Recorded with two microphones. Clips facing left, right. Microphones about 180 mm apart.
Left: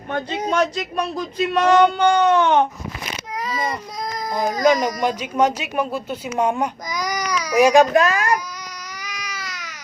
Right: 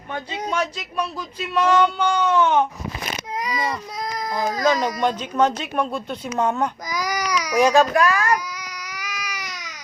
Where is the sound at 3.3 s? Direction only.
15° right (ahead or behind).